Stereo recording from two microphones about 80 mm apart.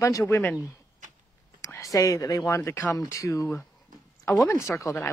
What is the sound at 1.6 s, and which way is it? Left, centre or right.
A woman's voice, left.